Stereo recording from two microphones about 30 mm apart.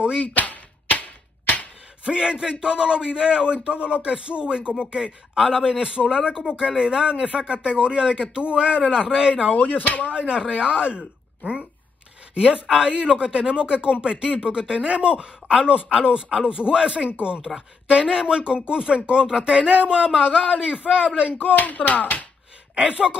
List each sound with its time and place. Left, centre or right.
0.1 s a sound: left
2.0 s a man's voice: right
5.3 s a man's voice: centre
9.5 s speech: left
10.1 s speech: right
12.4 s a man's voice: right
21.4 s speech: left
22.8 s speech: right